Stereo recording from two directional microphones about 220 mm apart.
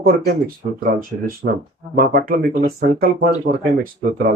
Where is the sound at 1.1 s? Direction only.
35° right (ahead or behind).